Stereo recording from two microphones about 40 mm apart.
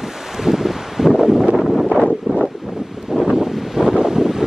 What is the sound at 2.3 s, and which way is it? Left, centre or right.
Wind, centre.